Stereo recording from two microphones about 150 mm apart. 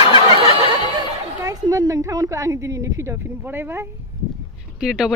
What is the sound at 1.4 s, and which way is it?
Speech, 25° right (ahead or behind).